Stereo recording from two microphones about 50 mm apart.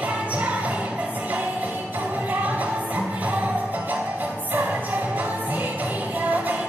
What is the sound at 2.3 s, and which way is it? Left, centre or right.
Music, right.